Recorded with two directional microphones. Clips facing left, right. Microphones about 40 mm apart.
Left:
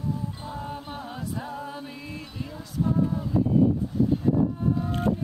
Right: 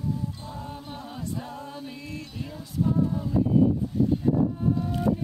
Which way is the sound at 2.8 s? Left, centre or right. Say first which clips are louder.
Even; centre.